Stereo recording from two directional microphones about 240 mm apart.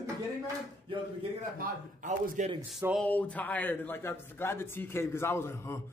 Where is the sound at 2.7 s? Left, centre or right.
Centre.